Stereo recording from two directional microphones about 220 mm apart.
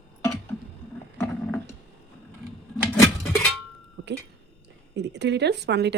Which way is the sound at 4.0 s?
50° right (ahead or behind).